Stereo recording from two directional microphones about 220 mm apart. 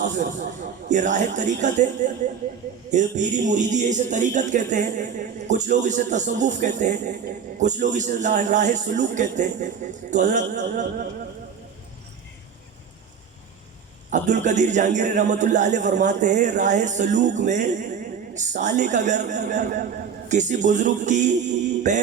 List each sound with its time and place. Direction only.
0.0 s a man's voice: 35° right (ahead or behind)
2.9 s a man's voice: 35° right (ahead or behind)
14.1 s a man's voice: 35° right (ahead or behind)